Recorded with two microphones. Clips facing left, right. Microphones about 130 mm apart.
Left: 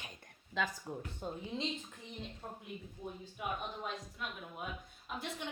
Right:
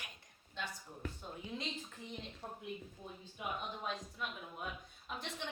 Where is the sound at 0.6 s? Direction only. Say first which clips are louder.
Left 8 dB; 90° left.